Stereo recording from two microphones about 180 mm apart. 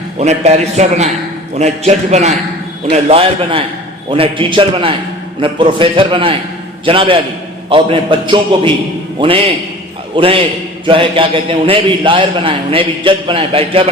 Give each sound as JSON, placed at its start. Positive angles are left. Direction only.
{"t": 0.2, "sound": "a man's voice", "side_deg": -40}